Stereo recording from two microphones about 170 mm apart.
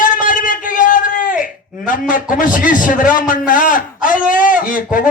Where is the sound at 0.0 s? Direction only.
50° left (ahead or behind).